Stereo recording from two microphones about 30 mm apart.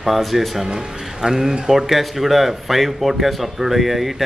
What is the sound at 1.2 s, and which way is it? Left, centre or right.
Speech, centre.